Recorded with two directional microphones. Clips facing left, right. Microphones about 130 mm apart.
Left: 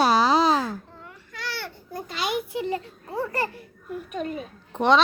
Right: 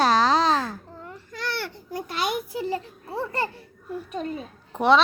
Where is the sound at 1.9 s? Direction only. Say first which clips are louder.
Right 1 dB; 60° right (ahead or behind).